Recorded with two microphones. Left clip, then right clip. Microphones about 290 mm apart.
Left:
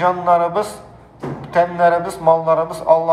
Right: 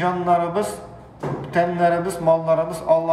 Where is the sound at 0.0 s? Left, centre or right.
Centre.